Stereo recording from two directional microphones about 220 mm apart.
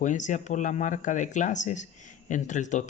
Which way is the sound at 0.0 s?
35° left (ahead or behind).